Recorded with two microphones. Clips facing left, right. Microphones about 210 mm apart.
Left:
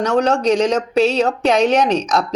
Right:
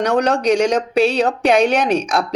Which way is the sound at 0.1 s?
15° right (ahead or behind).